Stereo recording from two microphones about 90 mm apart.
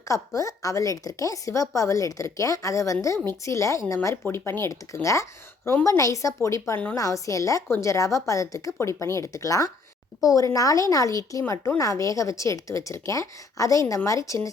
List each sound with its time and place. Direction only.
0.1 s a woman's voice: 40° left (ahead or behind)